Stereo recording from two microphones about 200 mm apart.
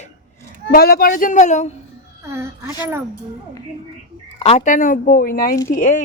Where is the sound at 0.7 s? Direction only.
50° left (ahead or behind).